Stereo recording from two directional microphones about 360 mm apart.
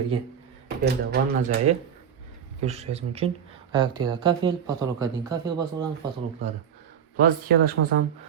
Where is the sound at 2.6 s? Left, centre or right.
Centre.